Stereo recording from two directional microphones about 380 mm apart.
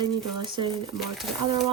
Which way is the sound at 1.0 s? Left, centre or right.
Centre.